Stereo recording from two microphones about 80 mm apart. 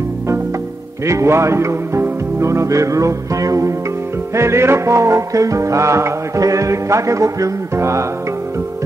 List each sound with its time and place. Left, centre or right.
1.0 s music: right
4.4 s music: right